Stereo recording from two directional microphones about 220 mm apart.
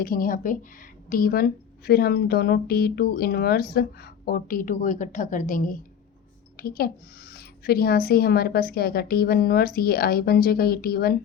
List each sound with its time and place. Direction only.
0.0 s a woman's voice: 40° left (ahead or behind)